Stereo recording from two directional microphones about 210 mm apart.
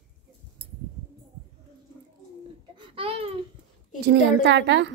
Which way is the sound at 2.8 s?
25° right (ahead or behind).